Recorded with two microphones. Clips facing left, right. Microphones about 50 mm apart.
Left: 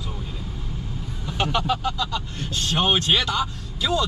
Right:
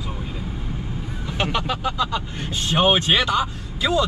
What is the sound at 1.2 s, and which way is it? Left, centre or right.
Speech, centre.